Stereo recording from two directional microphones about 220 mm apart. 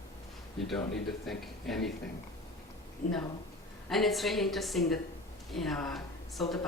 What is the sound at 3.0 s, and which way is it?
Speech, 35° left (ahead or behind).